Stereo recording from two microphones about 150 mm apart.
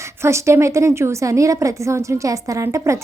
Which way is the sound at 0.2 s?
20° right (ahead or behind).